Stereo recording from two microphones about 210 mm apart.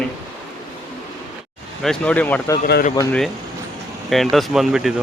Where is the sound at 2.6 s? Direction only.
40° left (ahead or behind).